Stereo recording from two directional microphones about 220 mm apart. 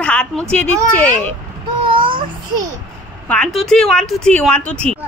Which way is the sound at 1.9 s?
20° right (ahead or behind).